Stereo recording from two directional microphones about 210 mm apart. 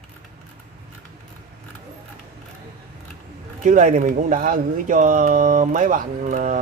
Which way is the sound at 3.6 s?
35° right (ahead or behind).